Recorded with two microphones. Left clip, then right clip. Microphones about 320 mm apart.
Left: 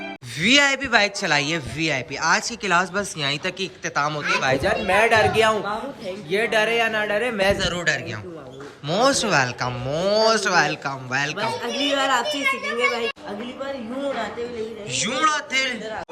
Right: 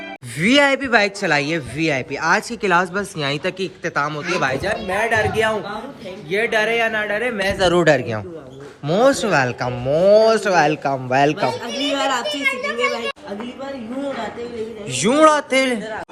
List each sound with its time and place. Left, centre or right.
0.3 s a man's voice: centre
7.6 s a man's voice: centre
12.4 s a child's voice: centre
14.9 s a man's voice: centre